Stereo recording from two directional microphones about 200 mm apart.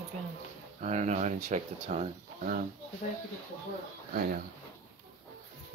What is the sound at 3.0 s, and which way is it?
Speech, 45° left (ahead or behind).